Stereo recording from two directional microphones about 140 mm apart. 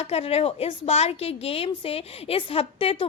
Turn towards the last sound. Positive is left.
turn(degrees=40)  # may be behind; listen again after turning